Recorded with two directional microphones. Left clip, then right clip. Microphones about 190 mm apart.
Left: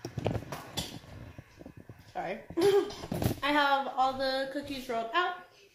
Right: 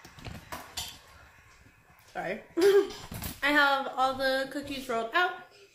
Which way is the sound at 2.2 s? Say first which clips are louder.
Right 1 dB; 10° right (ahead or behind).